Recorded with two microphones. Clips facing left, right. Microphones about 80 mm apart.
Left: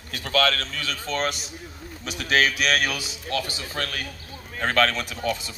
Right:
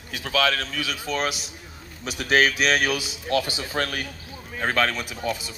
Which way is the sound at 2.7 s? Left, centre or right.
Centre.